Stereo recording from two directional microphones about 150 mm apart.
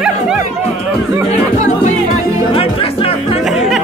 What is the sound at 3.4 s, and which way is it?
Music, centre (ahead or behind).